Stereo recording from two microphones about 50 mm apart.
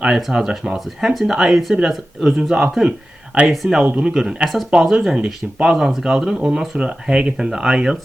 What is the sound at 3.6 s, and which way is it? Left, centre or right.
Speech, centre.